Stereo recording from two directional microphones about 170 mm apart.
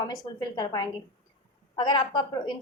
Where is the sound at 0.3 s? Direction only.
25° left (ahead or behind).